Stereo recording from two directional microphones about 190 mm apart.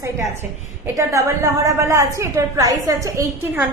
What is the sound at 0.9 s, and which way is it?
A woman's voice, 15° right (ahead or behind).